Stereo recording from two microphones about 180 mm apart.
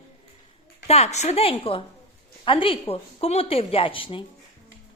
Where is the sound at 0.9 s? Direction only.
35° left (ahead or behind).